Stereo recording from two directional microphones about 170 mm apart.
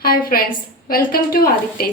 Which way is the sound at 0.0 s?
60° left (ahead or behind).